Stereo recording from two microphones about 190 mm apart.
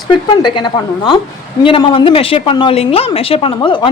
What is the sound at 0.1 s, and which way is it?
A woman's voice, 25° left (ahead or behind).